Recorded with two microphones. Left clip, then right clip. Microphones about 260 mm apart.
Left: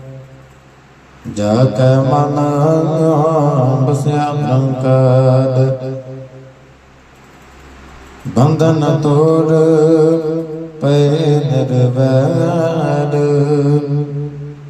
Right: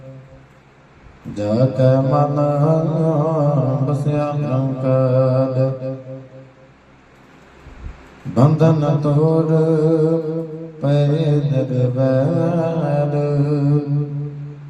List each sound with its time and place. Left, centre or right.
1.3 s mantra: left
8.4 s mantra: left